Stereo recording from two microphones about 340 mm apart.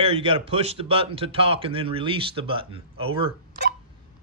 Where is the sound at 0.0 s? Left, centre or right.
Centre.